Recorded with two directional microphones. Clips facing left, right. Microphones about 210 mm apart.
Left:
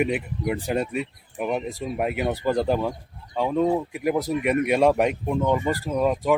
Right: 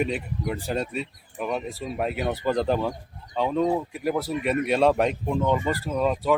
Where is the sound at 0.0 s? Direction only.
10° left (ahead or behind).